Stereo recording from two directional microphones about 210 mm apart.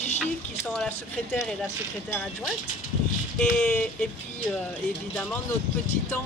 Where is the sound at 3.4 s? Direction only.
5° left (ahead or behind).